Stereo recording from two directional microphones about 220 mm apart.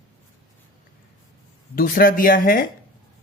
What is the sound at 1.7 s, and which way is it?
Speech, 40° left (ahead or behind).